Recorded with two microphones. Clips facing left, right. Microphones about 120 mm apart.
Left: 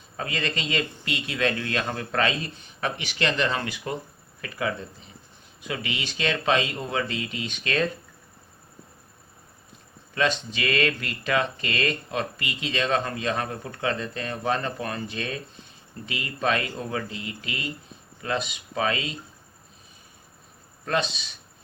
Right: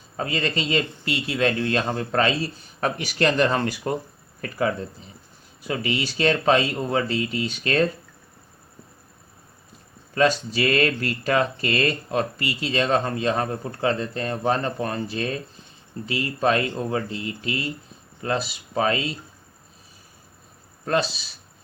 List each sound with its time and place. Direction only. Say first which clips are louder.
0.2 s speech: right 4 dB; 35° right (ahead or behind)
10.2 s speech: right 5 dB; 40° right (ahead or behind)